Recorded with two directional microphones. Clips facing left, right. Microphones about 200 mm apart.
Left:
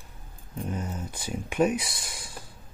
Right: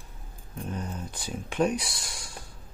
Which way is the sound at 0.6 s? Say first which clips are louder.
Left 2 dB; 10° left (ahead or behind).